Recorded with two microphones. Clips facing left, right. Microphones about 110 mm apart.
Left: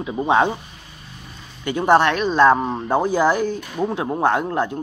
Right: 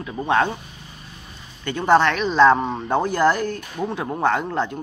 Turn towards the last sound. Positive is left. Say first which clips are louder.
# left 2 dB
turn(degrees=10)  # may be behind; listen again after turning